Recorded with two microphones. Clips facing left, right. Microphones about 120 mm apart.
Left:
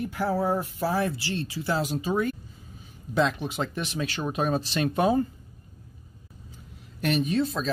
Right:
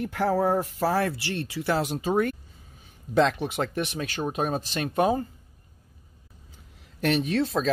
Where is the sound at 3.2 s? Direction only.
65° right (ahead or behind); by 4.8 s 45° right (ahead or behind).